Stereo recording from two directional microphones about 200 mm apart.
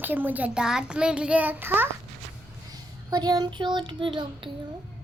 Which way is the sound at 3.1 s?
20° right (ahead or behind).